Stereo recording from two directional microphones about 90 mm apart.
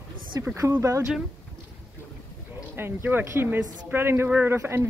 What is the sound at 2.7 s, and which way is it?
Speech, 25° right (ahead or behind).